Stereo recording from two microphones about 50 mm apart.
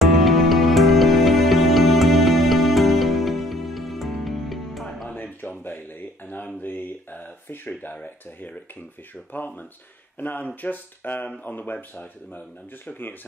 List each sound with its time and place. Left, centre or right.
0.0 s music: centre
5.1 s a sound: left
7.9 s speech: left